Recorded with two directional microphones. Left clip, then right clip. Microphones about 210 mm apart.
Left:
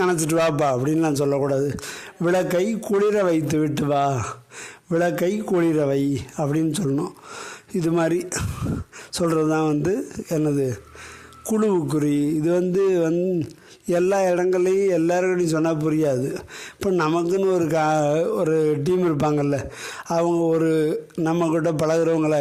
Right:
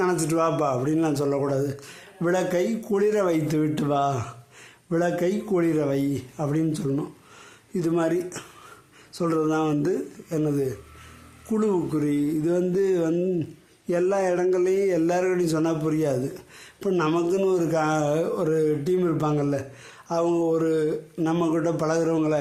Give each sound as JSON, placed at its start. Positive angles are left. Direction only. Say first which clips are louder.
{"t": 0.0, "sound": "a man's voice", "louder": "left 3 dB", "side_deg": 40}